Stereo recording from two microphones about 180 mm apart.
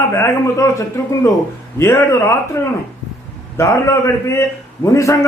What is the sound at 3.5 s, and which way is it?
A man's voice, 15° left (ahead or behind).